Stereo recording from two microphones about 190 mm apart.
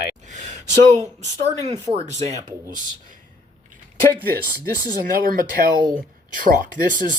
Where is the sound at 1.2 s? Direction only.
35° right (ahead or behind).